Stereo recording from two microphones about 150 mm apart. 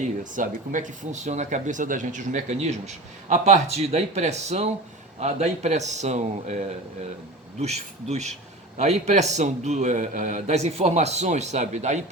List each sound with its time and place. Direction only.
0.3 s speech: 60° right (ahead or behind)